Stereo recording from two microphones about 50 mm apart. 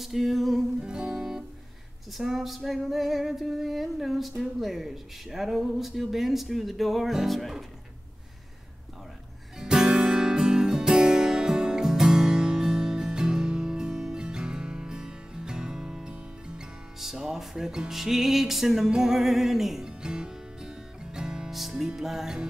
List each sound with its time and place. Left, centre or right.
0.0 s speech: centre
0.7 s music: centre
2.1 s speech: centre
9.6 s music: centre
19.9 s music: centre